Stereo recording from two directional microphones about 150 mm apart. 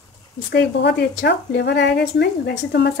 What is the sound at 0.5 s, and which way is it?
A woman's voice, 90° left.